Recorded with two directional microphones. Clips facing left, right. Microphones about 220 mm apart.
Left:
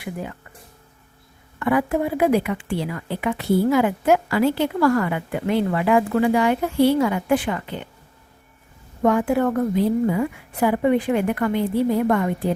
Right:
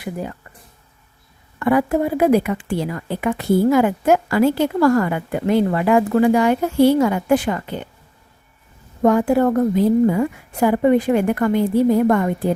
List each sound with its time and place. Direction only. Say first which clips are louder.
0.0 s a woman's voice: right 3 dB; 40° right (ahead or behind)
1.5 s a woman's voice: right 3 dB; 40° right (ahead or behind)
9.0 s a woman's voice: right 4 dB; 40° right (ahead or behind)